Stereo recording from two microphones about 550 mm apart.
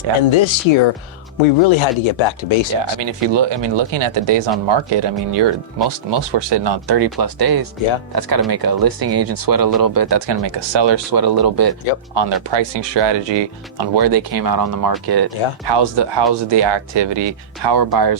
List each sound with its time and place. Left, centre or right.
0.3 s speech: left
3.0 s speech: right